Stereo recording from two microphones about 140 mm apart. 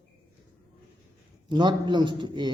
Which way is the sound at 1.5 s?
35° right (ahead or behind).